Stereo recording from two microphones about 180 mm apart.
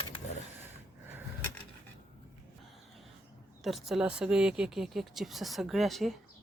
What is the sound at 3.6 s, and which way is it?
Speech, centre (ahead or behind).